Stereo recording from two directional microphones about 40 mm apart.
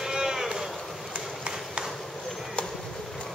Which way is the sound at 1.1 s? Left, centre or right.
Right.